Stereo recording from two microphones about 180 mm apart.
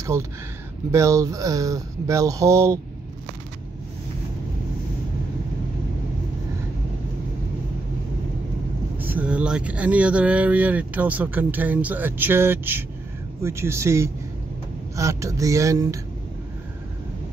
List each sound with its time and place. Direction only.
0.9 s speech: 15° right (ahead or behind)
8.9 s speech: 10° right (ahead or behind)